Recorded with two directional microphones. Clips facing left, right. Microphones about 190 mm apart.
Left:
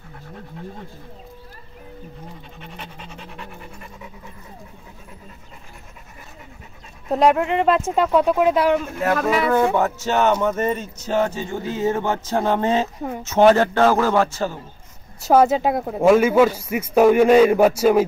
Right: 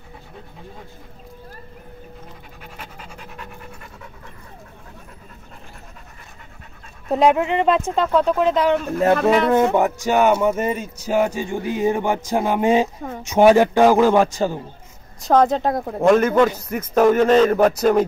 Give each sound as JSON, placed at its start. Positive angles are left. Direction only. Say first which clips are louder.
{"t": 2.6, "sound": "pant", "louder": "even", "side_deg": -5}
{"t": 7.1, "sound": "speech", "louder": "right 1 dB", "side_deg": 0}
{"t": 9.8, "sound": "speech", "louder": "right 2 dB", "side_deg": -15}
{"t": 15.1, "sound": "a man's voice", "louder": "left 1 dB", "side_deg": 5}